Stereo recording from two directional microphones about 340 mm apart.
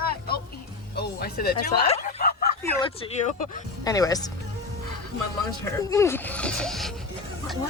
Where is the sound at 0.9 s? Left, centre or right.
Left.